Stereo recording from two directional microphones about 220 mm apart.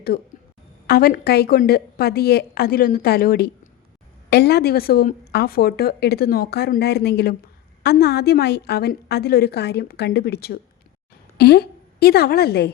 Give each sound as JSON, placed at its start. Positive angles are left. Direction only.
{"t": 0.9, "sound": "a woman's voice", "side_deg": 40}